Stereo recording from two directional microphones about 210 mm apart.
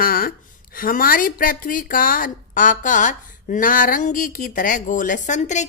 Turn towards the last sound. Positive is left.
turn(degrees=35)  # may be behind; listen again after turning